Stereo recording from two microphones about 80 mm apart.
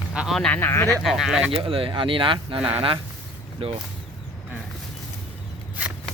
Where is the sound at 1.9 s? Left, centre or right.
Right.